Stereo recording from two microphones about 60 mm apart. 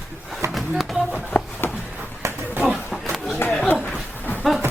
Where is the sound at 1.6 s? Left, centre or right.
Left.